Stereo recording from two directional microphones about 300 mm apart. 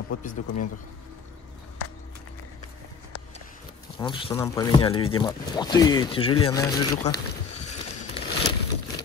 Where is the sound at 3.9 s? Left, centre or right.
Centre.